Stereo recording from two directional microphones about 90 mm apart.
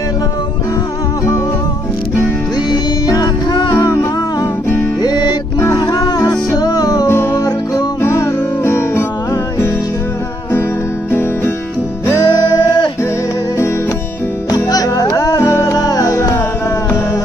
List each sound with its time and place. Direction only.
2.7 s music: 45° left (ahead or behind)
5.0 s music: 50° left (ahead or behind)
5.6 s music: 40° left (ahead or behind)
7.1 s music: 25° left (ahead or behind)
7.3 s music: 45° left (ahead or behind)
8.0 s music: 35° left (ahead or behind)
11.1 s music: 25° left (ahead or behind)
12.5 s music: 60° left (ahead or behind)
14.5 s music: 45° left (ahead or behind)